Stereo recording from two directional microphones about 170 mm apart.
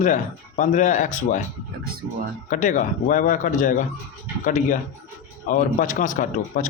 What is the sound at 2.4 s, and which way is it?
A man's voice, 50° left (ahead or behind).